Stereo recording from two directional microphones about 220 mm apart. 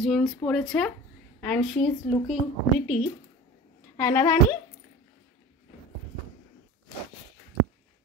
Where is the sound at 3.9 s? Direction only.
15° left (ahead or behind).